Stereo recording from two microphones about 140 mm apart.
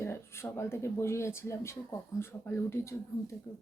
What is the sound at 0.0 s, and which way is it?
Speech, 20° left (ahead or behind).